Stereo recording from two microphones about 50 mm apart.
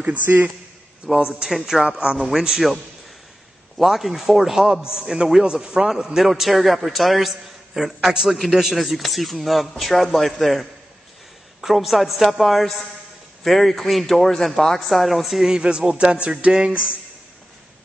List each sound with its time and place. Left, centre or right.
0.0 s speech: right
1.1 s a man's voice: centre
1.5 s a man's voice: centre
1.9 s speech: centre
2.1 s a man's voice: centre